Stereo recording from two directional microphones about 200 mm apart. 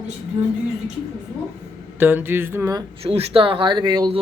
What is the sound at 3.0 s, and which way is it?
Speech, 30° right (ahead or behind).